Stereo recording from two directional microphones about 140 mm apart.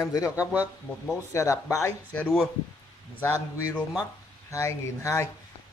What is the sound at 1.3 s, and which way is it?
Speech, 20° left (ahead or behind).